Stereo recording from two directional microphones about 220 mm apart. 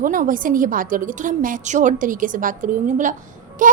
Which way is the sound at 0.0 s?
40° right (ahead or behind).